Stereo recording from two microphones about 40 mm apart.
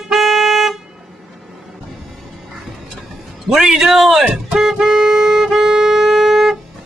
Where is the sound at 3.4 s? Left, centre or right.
Centre.